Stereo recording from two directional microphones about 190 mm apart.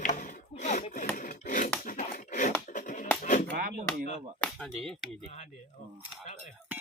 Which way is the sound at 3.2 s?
40° left (ahead or behind).